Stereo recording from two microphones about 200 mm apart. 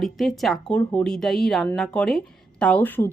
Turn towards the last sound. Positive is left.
turn(degrees=10)  # may be behind; listen again after turning